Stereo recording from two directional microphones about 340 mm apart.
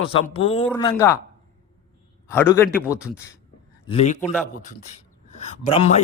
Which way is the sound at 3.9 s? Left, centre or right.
Centre.